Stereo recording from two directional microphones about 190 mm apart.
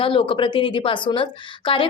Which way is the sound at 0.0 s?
25° left (ahead or behind).